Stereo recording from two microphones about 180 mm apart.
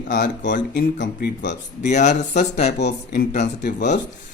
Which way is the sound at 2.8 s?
70° left (ahead or behind).